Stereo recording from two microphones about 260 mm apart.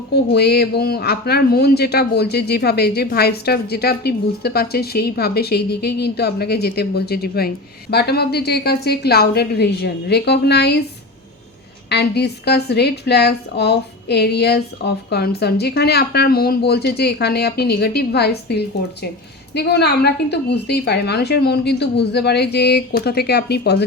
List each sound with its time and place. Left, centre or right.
0.1 s speech: left
11.9 s speech: left